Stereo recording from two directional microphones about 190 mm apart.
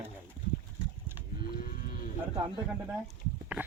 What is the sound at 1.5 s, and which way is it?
Cattle, 50° left (ahead or behind).